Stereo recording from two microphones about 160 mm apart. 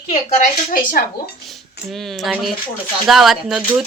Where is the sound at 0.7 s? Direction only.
60° left (ahead or behind).